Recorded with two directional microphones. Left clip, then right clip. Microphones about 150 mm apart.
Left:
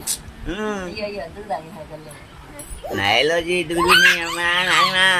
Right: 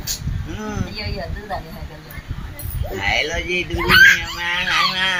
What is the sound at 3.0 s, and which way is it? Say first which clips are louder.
Speech: left 3 dB; 60° left (ahead or behind).